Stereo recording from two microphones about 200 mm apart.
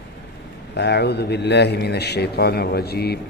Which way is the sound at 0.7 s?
55° left (ahead or behind).